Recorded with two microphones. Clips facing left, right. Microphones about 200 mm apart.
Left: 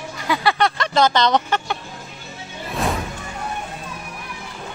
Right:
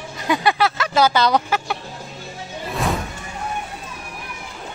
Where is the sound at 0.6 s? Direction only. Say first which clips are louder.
Even; 5° right (ahead or behind).